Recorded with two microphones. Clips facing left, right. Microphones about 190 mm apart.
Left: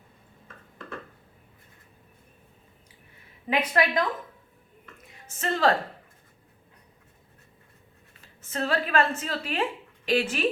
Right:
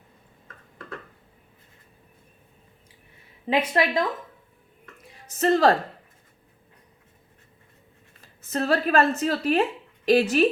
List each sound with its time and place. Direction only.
3.5 s speech: 25° right (ahead or behind)
5.4 s a woman's voice: 40° right (ahead or behind)
8.5 s a woman's voice: 40° right (ahead or behind)